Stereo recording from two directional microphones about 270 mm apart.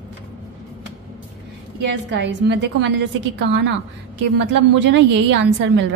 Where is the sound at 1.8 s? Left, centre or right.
Right.